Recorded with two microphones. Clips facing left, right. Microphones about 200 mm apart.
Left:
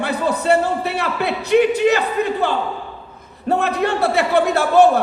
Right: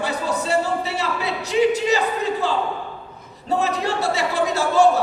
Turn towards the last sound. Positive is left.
turn(degrees=60)  # may be behind; listen again after turning